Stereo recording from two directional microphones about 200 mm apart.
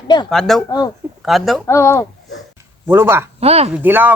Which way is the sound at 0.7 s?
20° left (ahead or behind).